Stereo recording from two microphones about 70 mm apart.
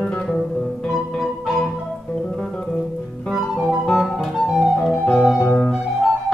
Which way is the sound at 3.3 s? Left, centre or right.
Centre.